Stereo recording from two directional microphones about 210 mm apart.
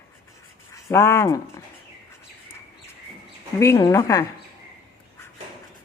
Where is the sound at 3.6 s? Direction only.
15° left (ahead or behind).